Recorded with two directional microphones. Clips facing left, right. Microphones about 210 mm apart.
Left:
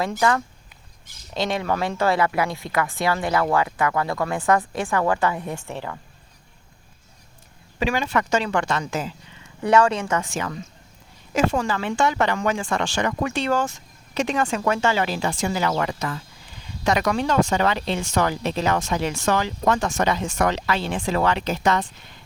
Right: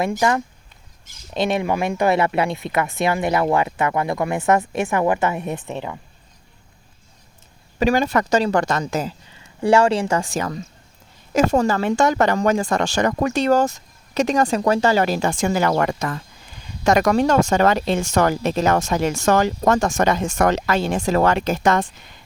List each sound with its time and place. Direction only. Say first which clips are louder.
0.0 s speech: right 2 dB; 20° right (ahead or behind)
7.8 s speech: right 5 dB; 45° right (ahead or behind)